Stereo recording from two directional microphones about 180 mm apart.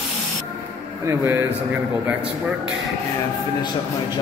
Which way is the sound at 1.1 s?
15° right (ahead or behind).